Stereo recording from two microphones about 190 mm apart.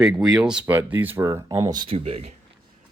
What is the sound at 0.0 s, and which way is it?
Speech, 5° right (ahead or behind).